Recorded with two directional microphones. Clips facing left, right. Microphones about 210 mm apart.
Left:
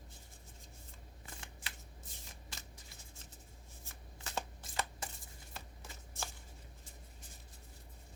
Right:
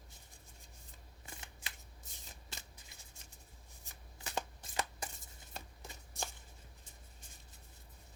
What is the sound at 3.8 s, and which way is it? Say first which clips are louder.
Shuffling cards: right 1 dB; 15° right (ahead or behind).